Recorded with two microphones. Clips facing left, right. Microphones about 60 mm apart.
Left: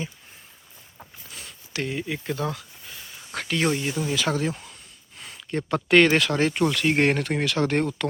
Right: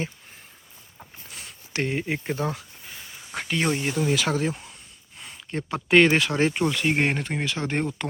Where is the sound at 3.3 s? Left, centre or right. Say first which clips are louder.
Left 1 dB; centre.